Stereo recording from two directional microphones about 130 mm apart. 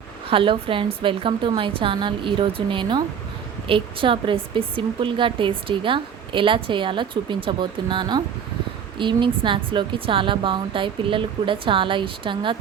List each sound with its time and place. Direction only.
0.3 s a woman's voice: 40° right (ahead or behind)